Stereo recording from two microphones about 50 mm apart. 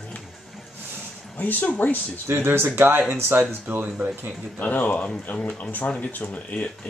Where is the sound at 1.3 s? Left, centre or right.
Left.